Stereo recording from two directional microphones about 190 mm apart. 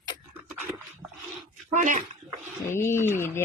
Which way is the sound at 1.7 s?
40° right (ahead or behind).